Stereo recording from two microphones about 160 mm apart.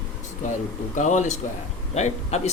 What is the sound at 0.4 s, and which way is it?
Speech, 50° left (ahead or behind).